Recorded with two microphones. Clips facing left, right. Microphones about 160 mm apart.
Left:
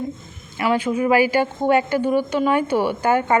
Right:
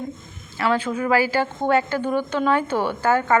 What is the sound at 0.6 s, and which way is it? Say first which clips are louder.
A woman's voice: left 2 dB; 10° left (ahead or behind).